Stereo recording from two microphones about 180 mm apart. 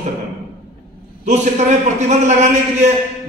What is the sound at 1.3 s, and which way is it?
A man's voice, 40° right (ahead or behind).